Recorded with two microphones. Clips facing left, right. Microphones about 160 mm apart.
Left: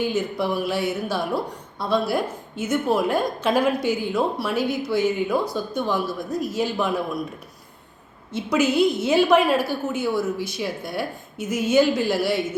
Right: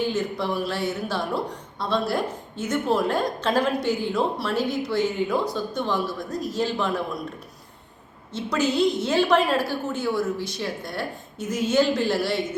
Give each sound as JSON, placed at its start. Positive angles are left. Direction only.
{"t": 0.0, "sound": "a woman's voice", "side_deg": 10}
{"t": 8.4, "sound": "a woman's voice", "side_deg": 10}